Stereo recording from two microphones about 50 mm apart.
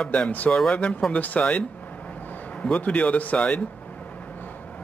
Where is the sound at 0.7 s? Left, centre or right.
Left.